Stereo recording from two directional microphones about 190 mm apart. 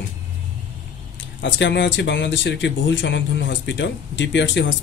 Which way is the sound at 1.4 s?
70° left (ahead or behind).